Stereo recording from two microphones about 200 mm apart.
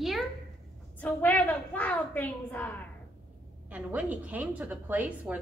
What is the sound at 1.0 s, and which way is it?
A woman's voice, 10° left (ahead or behind).